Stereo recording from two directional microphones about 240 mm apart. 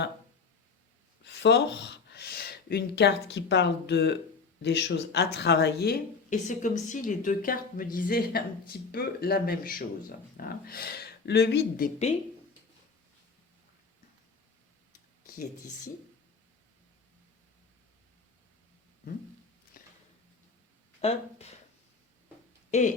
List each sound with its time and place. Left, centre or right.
1.2 s speech: left
19.8 s a sound: left
21.0 s speech: left
22.7 s speech: left